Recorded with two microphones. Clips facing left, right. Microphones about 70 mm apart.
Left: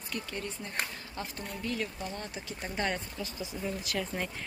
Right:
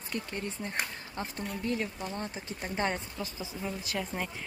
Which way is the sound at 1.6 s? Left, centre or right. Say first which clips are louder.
Right 1 dB; right.